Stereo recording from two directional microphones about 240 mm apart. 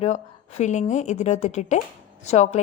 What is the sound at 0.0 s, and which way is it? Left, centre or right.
A woman's voice, left.